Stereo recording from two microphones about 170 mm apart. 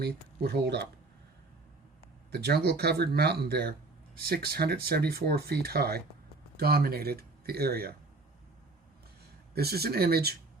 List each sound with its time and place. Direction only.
0.0 s speech: 70° right (ahead or behind)
2.3 s speech: 70° right (ahead or behind)
9.6 s speech: 65° right (ahead or behind)